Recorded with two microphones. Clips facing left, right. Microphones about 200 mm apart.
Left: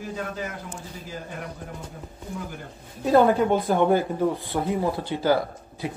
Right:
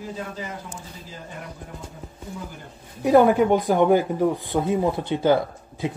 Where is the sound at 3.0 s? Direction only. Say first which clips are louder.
Right 2 dB; 15° right (ahead or behind).